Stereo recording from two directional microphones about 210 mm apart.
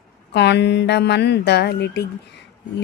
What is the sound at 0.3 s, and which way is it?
A woman's voice, 55° left (ahead or behind).